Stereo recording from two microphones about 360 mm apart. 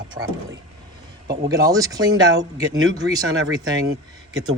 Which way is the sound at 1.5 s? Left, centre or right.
Centre.